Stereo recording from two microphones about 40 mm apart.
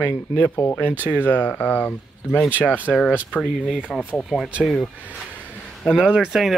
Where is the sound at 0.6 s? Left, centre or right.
Left.